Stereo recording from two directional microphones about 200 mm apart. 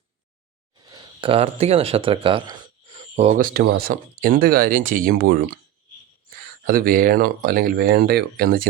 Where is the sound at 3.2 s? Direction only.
40° right (ahead or behind).